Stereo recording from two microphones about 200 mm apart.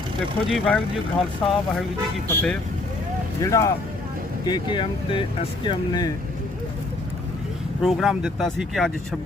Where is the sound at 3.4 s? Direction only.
15° left (ahead or behind).